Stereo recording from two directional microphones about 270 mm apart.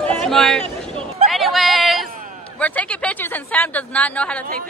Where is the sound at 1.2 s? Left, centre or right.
Centre.